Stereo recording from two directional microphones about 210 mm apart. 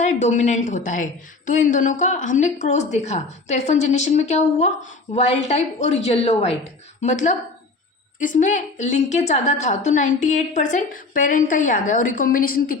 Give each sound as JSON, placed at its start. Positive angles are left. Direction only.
{"t": 0.0, "sound": "a woman's voice", "side_deg": 35}